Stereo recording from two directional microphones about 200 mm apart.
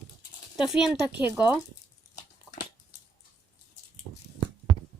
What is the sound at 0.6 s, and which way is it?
Speech, centre (ahead or behind).